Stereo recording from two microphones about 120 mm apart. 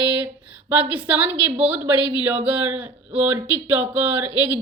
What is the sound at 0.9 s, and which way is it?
A woman's voice, 15° right (ahead or behind).